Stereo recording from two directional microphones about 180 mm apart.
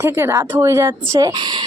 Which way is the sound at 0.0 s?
15° right (ahead or behind).